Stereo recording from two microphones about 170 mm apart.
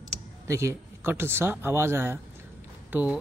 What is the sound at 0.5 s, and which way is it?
Speech, 15° right (ahead or behind).